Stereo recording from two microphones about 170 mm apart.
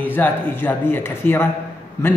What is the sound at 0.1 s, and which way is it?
A man's voice, 10° left (ahead or behind).